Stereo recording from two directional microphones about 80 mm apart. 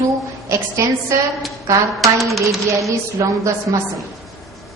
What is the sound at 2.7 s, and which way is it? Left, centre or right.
A woman's voice, right.